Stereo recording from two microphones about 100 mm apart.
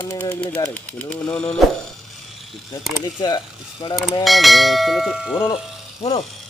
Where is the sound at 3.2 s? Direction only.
45° left (ahead or behind).